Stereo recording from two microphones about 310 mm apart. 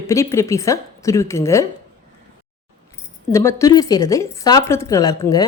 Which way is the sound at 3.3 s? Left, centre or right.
Centre.